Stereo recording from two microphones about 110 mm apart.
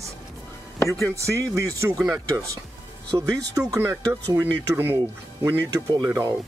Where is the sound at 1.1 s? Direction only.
30° right (ahead or behind).